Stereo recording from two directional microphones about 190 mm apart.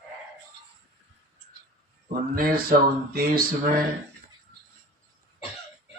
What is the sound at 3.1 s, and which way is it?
Speech, 55° right (ahead or behind).